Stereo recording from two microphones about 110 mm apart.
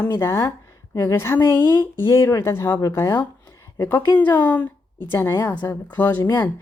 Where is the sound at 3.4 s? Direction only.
20° left (ahead or behind).